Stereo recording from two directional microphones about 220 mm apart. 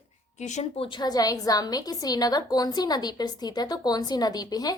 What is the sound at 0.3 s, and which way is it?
A woman's voice, 30° left (ahead or behind).